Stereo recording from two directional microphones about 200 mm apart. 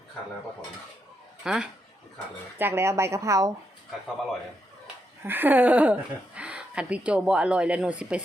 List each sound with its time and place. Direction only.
1.5 s speech: 5° right (ahead or behind)
5.2 s speech: 10° right (ahead or behind)